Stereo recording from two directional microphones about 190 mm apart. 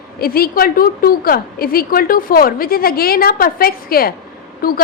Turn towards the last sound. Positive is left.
turn(degrees=50)  # may be behind; listen again after turning